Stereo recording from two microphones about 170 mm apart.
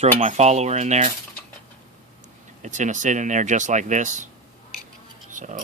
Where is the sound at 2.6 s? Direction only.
45° right (ahead or behind).